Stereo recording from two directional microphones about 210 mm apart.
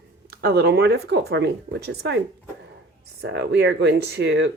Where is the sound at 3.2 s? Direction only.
55° right (ahead or behind).